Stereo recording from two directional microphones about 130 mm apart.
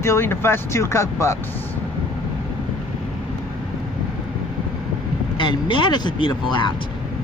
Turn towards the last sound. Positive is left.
turn(degrees=35)  # may be behind; listen again after turning